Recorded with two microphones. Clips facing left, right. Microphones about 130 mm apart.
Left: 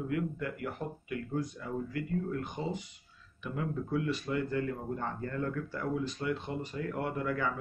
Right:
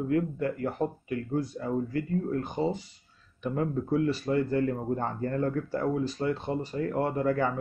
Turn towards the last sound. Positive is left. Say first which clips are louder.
# right 6 dB
turn(degrees=-35)  # may be behind; listen again after turning